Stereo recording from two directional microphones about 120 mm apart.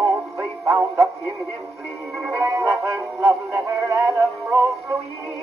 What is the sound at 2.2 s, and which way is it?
Music, 25° right (ahead or behind).